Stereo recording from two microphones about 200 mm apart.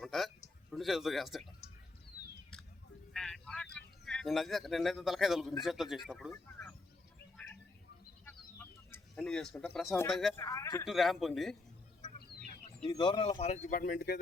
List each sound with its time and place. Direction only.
0.0 s a sound: centre (ahead or behind)
0.7 s speech: centre (ahead or behind)
3.1 s speech: centre (ahead or behind)
6.3 s a sound: 5° left (ahead or behind)
8.2 s bird: 10° left (ahead or behind)
10.1 s speech: centre (ahead or behind)
10.3 s speech: 15° left (ahead or behind)
10.8 s speech: centre (ahead or behind)
12.9 s speech: 25° left (ahead or behind); by 14.2 s 45° left (ahead or behind)